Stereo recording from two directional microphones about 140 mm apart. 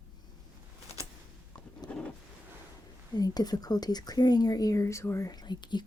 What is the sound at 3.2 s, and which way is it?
Speech, 30° left (ahead or behind).